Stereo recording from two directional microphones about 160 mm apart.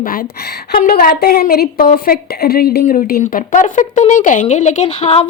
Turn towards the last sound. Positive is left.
turn(degrees=40)  # may be behind; listen again after turning